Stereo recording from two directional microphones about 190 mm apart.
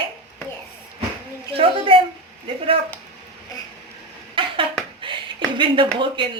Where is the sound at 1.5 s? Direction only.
30° right (ahead or behind).